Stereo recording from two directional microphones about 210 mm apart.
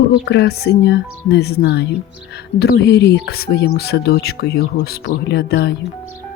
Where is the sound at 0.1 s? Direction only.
55° left (ahead or behind).